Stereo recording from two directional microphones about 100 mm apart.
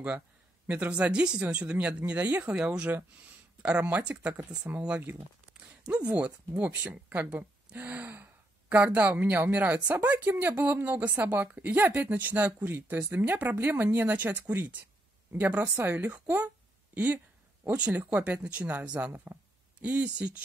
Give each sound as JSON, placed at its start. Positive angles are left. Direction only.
{"t": 0.7, "sound": "speech", "side_deg": -15}